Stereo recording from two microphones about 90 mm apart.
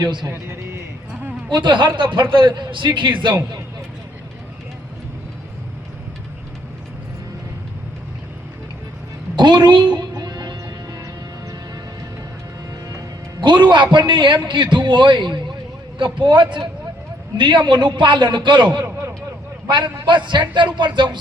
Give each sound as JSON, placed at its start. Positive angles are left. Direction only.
{"t": 0.0, "sound": "a man's voice", "side_deg": -55}
{"t": 0.3, "sound": "a man's voice", "side_deg": -30}
{"t": 1.5, "sound": "a man's voice", "side_deg": -60}
{"t": 9.3, "sound": "music", "side_deg": -55}
{"t": 13.4, "sound": "a man's voice", "side_deg": -60}